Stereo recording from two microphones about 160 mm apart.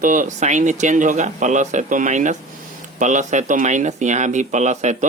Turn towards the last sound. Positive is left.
turn(degrees=-45)  # may be behind; listen again after turning